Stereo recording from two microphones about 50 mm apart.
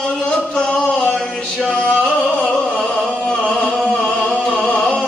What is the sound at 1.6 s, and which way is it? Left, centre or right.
Music, left.